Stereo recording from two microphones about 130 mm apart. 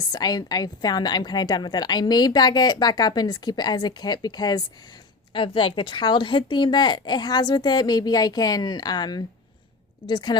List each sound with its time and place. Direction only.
0.1 s a woman's voice: 30° left (ahead or behind)
5.3 s a woman's voice: 40° left (ahead or behind)